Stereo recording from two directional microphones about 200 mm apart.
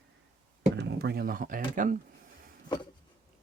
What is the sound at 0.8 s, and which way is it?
Speech, 55° right (ahead or behind).